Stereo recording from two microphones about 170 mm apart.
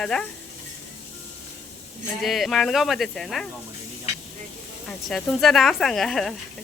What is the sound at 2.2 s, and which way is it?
Speech, centre (ahead or behind).